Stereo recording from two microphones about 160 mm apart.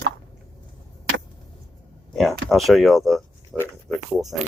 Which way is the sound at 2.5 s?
Centre (ahead or behind).